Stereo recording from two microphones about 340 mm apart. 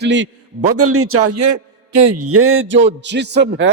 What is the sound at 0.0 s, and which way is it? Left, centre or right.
A man's voice, right.